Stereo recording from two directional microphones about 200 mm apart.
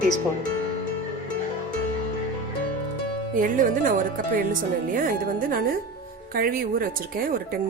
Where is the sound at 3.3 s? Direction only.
40° right (ahead or behind).